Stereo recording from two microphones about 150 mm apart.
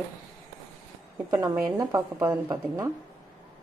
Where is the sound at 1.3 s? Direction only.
20° right (ahead or behind).